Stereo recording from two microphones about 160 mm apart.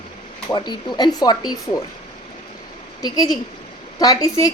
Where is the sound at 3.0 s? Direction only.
25° left (ahead or behind).